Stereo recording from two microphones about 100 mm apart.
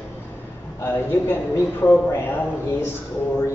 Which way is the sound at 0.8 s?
25° left (ahead or behind).